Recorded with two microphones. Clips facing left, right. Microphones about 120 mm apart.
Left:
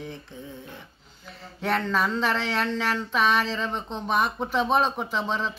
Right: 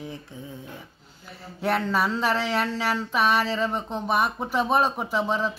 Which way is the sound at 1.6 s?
10° right (ahead or behind).